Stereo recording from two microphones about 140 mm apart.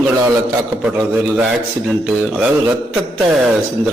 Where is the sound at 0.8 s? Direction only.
10° right (ahead or behind).